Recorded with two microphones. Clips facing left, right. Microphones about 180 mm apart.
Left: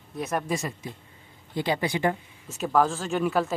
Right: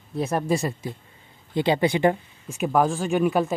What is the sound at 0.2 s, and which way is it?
Speech, 30° right (ahead or behind).